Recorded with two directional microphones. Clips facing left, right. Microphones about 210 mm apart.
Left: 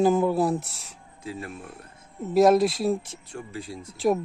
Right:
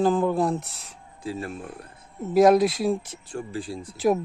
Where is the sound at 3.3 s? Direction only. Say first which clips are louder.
Right 4 dB; 30° right (ahead or behind).